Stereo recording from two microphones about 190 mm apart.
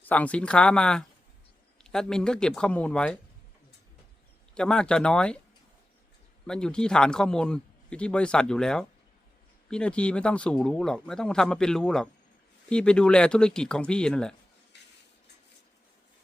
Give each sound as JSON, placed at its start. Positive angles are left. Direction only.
{"t": 0.0, "sound": "speech", "side_deg": 10}
{"t": 4.5, "sound": "speech", "side_deg": 5}
{"t": 6.5, "sound": "speech", "side_deg": 5}
{"t": 14.7, "sound": "a sound", "side_deg": 65}